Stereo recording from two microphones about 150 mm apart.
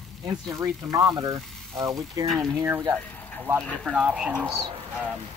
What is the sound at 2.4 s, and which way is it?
Speech, 20° right (ahead or behind).